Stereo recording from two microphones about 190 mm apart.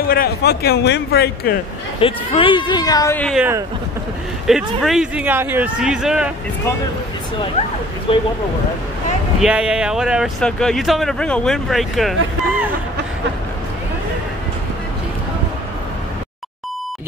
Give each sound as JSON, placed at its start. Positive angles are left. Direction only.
{"t": 0.1, "sound": "speech", "side_deg": 55}
{"t": 2.0, "sound": "speech", "side_deg": 30}
{"t": 3.2, "sound": "speech", "side_deg": 5}
{"t": 4.5, "sound": "speech", "side_deg": 0}
{"t": 8.1, "sound": "speech", "side_deg": 30}
{"t": 9.4, "sound": "speech", "side_deg": -5}